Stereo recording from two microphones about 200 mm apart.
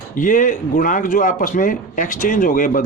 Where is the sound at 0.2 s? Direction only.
40° left (ahead or behind).